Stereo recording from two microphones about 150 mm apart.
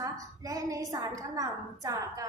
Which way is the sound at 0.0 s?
20° right (ahead or behind).